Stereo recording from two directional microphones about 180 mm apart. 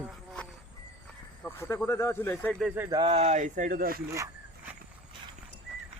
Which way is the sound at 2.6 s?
5° right (ahead or behind).